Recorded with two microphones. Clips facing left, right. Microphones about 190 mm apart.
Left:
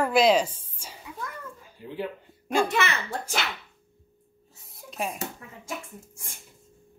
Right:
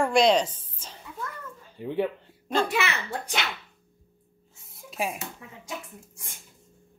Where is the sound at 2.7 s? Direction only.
5° right (ahead or behind).